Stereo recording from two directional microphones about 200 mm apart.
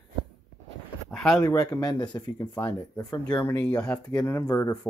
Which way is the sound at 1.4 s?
15° left (ahead or behind).